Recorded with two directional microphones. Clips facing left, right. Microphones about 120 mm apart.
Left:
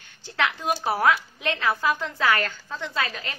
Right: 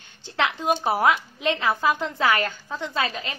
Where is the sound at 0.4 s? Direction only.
20° right (ahead or behind).